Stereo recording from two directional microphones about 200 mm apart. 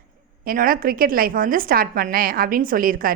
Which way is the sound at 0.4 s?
45° right (ahead or behind).